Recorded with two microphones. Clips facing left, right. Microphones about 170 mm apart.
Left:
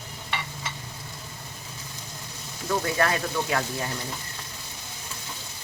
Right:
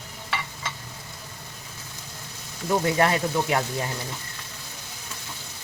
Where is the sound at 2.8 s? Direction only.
20° right (ahead or behind).